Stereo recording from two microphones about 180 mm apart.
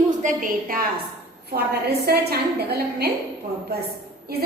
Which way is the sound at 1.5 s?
60° right (ahead or behind).